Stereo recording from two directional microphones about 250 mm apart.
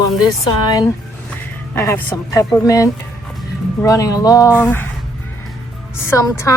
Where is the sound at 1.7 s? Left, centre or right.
Centre.